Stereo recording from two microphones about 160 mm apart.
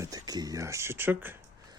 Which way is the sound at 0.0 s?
20° right (ahead or behind).